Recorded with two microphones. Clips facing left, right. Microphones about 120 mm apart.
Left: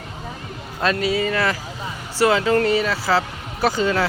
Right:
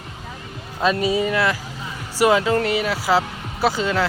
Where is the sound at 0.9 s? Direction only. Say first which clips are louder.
Right 1 dB; 15° right (ahead or behind).